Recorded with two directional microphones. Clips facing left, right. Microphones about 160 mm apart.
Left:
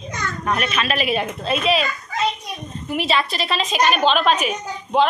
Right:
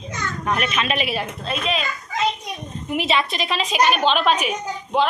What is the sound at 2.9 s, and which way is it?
A child's voice, 20° right (ahead or behind).